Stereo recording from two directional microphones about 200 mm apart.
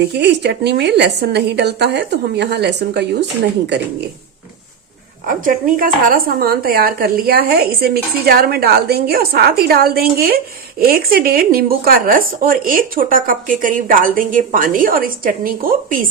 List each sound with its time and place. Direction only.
0.2 s a woman's voice: 55° right (ahead or behind)
5.3 s a woman's voice: 45° right (ahead or behind)